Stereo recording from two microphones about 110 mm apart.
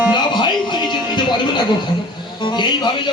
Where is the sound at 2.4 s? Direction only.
45° left (ahead or behind).